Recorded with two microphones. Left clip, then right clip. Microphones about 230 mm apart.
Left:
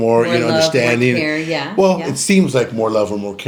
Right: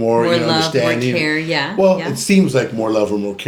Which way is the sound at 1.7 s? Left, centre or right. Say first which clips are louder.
Left 1 dB; left.